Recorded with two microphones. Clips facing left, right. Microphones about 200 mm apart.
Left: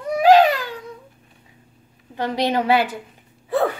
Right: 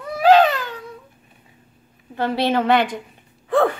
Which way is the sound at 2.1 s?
15° left (ahead or behind).